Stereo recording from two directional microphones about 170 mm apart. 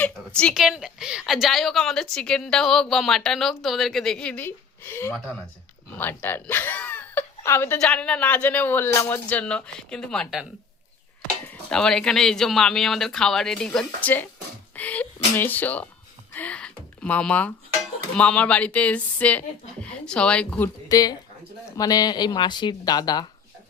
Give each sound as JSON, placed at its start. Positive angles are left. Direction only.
{"t": 0.0, "sound": "a woman's voice", "side_deg": 5}
{"t": 11.4, "sound": "a woman's voice", "side_deg": 5}
{"t": 20.9, "sound": "speech", "side_deg": 20}